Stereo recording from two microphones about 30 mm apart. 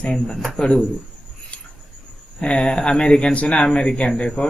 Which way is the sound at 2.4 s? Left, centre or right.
Left.